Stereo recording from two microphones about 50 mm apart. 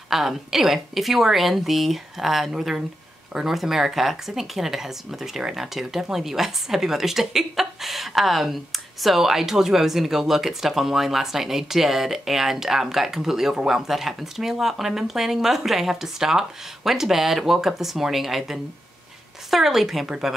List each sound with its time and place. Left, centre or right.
0.1 s speech: centre